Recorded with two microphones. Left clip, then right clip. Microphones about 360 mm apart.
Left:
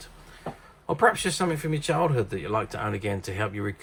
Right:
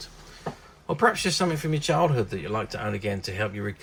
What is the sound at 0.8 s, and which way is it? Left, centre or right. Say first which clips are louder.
Speech: left 1 dB; centre.